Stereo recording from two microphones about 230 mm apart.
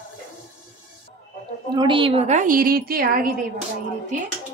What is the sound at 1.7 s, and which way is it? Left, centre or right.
Speech, right.